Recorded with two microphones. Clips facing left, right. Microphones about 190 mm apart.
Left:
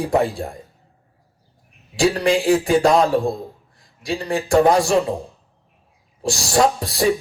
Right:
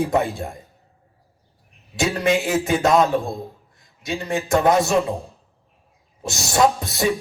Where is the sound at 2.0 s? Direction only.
20° right (ahead or behind).